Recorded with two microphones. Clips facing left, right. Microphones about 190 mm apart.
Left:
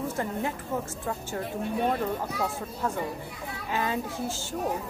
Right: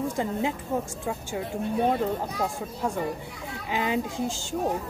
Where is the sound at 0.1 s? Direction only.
15° right (ahead or behind).